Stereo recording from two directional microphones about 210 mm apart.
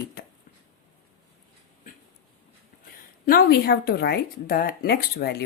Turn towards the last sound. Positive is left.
turn(degrees=50)  # may be behind; listen again after turning